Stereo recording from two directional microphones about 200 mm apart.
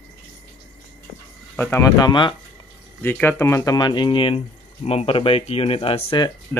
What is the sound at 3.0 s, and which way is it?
Speech, 10° left (ahead or behind).